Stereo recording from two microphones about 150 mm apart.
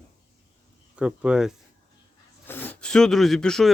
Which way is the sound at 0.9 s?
5° right (ahead or behind).